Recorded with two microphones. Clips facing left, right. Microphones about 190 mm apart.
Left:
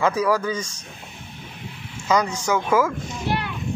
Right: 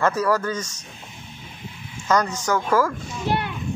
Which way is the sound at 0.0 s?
10° left (ahead or behind).